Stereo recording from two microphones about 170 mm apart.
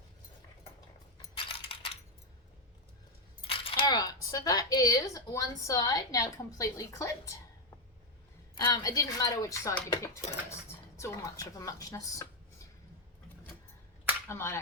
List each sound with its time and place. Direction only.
1.4 s coin: 30° left (ahead or behind)
3.4 s speech: 30° left (ahead or behind)
8.5 s speech: 20° left (ahead or behind)
14.3 s speech: 15° left (ahead or behind)